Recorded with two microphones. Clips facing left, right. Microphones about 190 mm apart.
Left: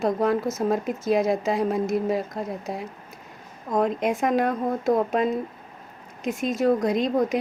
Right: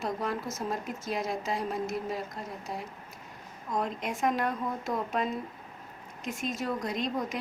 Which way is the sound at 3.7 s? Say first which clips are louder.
Left 10 dB; 60° left (ahead or behind).